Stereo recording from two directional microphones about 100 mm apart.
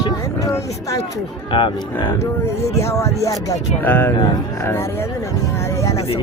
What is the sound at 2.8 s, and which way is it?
Speech, 30° left (ahead or behind).